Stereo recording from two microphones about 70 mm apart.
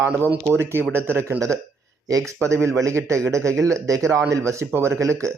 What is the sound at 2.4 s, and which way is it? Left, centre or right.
A man's voice, right.